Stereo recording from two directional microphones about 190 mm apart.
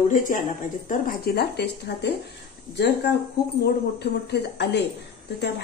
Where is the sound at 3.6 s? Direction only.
60° left (ahead or behind).